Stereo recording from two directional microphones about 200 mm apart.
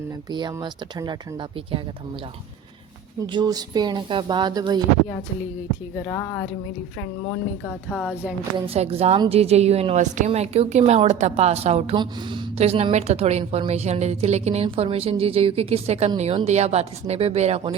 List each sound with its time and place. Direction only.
0.3 s speech: 20° right (ahead or behind)
3.3 s speech: 20° right (ahead or behind)
7.6 s speech: centre (ahead or behind)
8.5 s a woman's voice: 30° right (ahead or behind)